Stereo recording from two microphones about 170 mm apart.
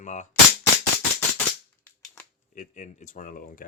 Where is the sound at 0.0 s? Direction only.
45° left (ahead or behind).